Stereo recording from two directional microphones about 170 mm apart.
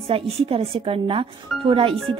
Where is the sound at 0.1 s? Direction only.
30° right (ahead or behind).